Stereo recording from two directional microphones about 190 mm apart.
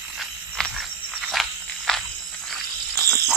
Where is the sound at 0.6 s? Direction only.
5° left (ahead or behind).